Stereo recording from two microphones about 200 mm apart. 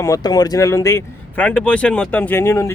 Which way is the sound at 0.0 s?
20° left (ahead or behind).